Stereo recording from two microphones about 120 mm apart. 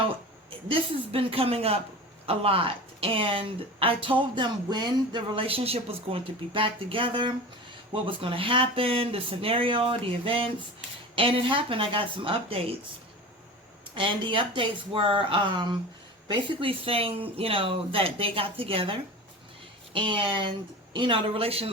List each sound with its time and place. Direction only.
0.5 s speech: 50° right (ahead or behind)
13.9 s speech: 45° right (ahead or behind)